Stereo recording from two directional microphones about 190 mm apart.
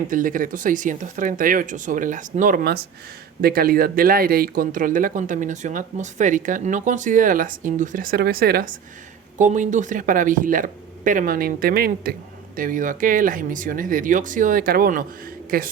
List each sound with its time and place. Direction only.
0.1 s speech: 45° right (ahead or behind)
9.4 s speech: 40° right (ahead or behind)